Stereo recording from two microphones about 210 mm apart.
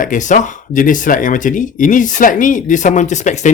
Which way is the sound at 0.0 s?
40° left (ahead or behind).